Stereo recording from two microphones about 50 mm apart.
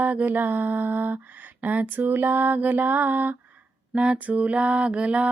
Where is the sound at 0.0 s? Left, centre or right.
Right.